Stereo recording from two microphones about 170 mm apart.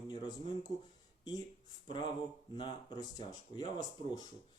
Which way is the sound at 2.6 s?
25° left (ahead or behind).